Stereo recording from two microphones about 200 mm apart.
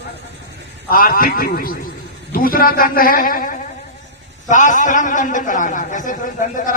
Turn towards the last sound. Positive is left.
turn(degrees=40)  # may be behind; listen again after turning